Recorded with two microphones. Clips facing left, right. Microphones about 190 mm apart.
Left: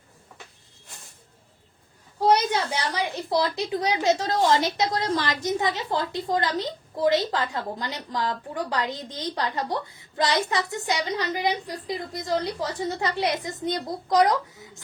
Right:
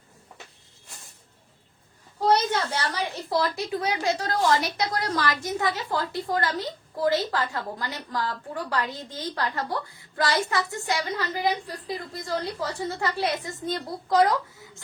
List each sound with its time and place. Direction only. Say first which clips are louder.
2.2 s a woman's voice: left 1 dB; 15° left (ahead or behind)